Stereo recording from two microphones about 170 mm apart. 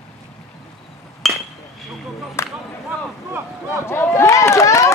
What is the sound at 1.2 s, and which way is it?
Chink, centre (ahead or behind).